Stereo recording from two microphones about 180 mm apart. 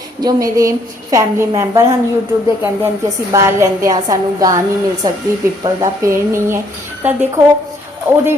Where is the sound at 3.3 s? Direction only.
15° right (ahead or behind).